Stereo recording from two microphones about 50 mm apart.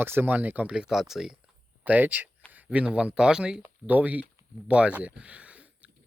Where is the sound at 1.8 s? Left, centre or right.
Right.